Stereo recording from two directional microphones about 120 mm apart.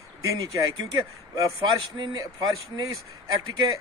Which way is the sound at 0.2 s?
30° right (ahead or behind).